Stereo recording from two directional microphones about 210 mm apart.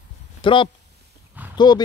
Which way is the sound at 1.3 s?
10° right (ahead or behind).